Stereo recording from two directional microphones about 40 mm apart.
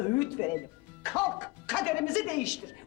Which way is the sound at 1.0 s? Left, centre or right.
Centre.